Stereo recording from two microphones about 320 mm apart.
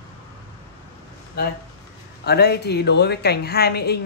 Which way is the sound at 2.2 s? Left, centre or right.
Left.